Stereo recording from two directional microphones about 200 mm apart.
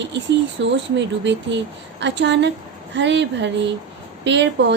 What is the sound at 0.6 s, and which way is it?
A woman's voice, 65° right (ahead or behind).